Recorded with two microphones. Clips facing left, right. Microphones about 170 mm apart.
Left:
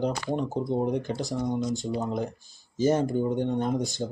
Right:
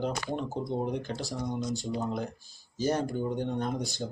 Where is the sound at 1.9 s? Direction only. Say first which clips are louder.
Left 3 dB; 20° left (ahead or behind).